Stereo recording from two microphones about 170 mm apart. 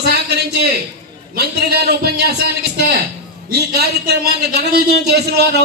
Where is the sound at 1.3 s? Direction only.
70° right (ahead or behind).